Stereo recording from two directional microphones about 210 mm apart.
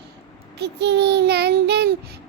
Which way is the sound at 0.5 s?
55° right (ahead or behind).